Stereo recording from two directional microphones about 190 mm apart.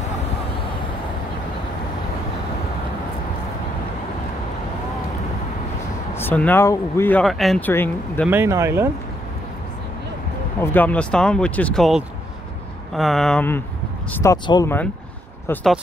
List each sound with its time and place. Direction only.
6.1 s speech: 10° left (ahead or behind)
8.3 s speech: 15° right (ahead or behind)
10.6 s speech: 10° left (ahead or behind)
14.1 s speech: 15° left (ahead or behind)